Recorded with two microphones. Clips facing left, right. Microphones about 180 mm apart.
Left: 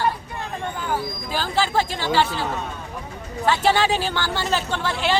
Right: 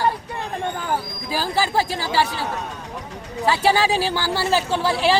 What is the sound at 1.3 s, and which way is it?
Speech, 10° right (ahead or behind).